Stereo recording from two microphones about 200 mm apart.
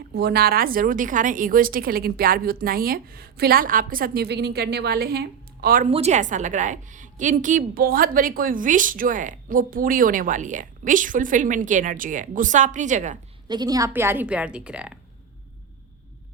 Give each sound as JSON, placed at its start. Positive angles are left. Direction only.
{"t": 0.1, "sound": "a woman's voice", "side_deg": -55}
{"t": 5.9, "sound": "a woman's voice", "side_deg": -35}
{"t": 13.5, "sound": "a woman's voice", "side_deg": -20}